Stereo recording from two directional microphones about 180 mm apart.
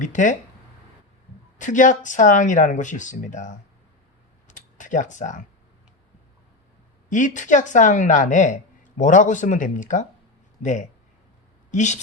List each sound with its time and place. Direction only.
0.0 s speech: 45° left (ahead or behind)
1.5 s speech: 45° left (ahead or behind)
4.4 s a sound: 45° left (ahead or behind)
7.1 s speech: 45° left (ahead or behind)